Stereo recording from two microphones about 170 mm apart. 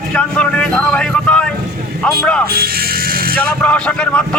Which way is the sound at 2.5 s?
65° right (ahead or behind).